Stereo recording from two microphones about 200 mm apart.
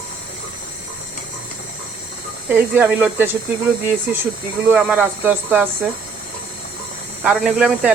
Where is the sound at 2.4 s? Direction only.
10° right (ahead or behind).